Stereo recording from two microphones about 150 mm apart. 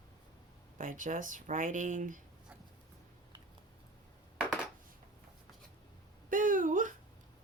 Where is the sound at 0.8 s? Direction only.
60° right (ahead or behind).